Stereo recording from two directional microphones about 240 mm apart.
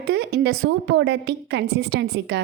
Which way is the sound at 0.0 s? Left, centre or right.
Right.